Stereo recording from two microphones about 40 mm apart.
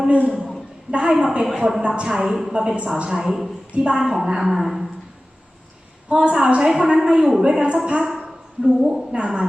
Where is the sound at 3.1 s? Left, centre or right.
Centre.